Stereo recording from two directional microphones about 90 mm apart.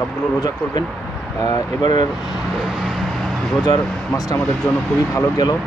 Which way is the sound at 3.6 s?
45° left (ahead or behind).